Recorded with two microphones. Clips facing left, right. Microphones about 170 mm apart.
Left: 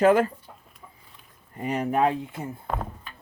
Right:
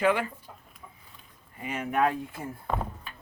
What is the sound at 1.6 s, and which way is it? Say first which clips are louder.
Speech: left 4 dB; 35° left (ahead or behind).